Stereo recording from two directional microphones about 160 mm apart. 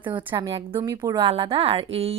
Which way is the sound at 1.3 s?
35° right (ahead or behind).